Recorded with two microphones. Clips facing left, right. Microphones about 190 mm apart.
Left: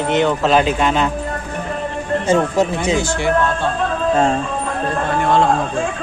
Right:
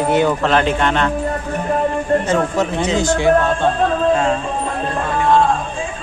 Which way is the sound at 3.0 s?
15° right (ahead or behind).